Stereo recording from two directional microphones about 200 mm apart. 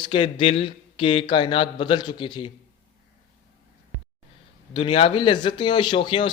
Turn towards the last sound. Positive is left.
turn(degrees=25)  # may be behind; listen again after turning